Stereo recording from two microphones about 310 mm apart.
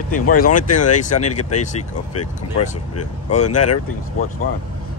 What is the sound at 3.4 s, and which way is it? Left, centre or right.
Speech, left.